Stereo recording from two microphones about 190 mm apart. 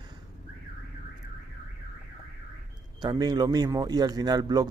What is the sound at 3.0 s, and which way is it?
A man's voice, 20° right (ahead or behind).